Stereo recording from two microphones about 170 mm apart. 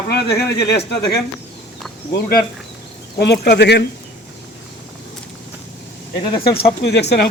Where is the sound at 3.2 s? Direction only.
75° left (ahead or behind).